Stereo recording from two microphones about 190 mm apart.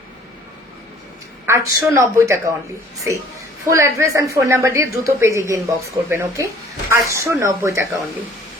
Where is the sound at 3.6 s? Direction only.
15° right (ahead or behind).